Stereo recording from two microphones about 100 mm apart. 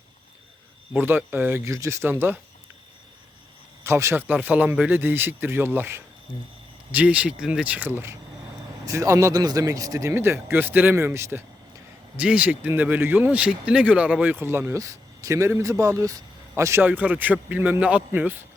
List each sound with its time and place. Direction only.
0.9 s speech: 20° right (ahead or behind)
3.8 s speech: 25° right (ahead or behind)
6.9 s a man's voice: 15° right (ahead or behind)
8.9 s speech: 35° right (ahead or behind)
12.1 s speech: 15° right (ahead or behind); by 16.8 s 30° right (ahead or behind)
16.8 s a man's voice: 15° right (ahead or behind)